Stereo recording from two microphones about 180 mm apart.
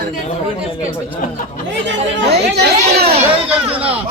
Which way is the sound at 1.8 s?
65° right (ahead or behind).